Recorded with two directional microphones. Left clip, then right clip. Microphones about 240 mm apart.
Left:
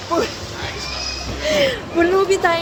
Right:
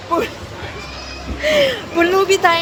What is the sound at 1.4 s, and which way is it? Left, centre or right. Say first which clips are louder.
Speech: right 3 dB; centre.